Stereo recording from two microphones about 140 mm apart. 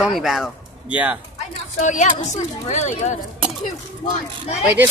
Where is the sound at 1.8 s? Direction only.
60° left (ahead or behind).